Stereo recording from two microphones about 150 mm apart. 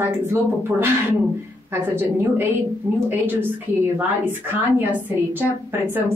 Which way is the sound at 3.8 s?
15° right (ahead or behind).